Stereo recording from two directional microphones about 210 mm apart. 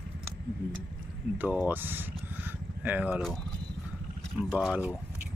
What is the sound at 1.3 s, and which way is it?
Speech, 10° right (ahead or behind).